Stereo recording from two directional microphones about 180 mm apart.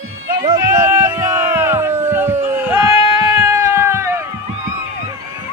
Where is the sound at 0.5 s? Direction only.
15° right (ahead or behind).